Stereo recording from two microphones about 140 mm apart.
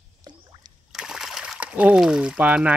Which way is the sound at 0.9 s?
5° right (ahead or behind).